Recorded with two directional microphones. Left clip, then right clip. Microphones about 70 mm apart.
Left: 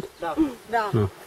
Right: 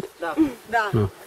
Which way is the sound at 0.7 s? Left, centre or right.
Right.